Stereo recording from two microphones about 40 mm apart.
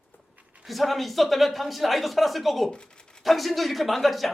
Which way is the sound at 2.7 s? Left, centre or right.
Left.